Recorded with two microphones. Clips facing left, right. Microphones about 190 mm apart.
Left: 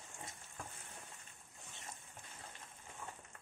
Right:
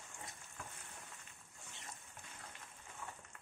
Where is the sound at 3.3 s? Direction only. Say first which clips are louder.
Left 1 dB; 35° left (ahead or behind).